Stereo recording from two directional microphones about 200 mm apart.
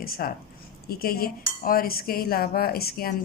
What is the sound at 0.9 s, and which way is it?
Cutlery, 50° left (ahead or behind).